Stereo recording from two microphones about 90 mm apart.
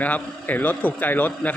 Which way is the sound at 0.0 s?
20° left (ahead or behind).